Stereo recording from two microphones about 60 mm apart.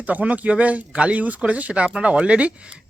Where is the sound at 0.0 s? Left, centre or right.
Right.